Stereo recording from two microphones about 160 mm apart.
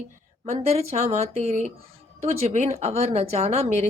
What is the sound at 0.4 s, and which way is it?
A woman's voice, 40° right (ahead or behind).